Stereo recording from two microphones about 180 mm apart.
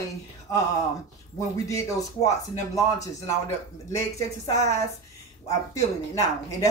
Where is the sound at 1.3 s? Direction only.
15° left (ahead or behind).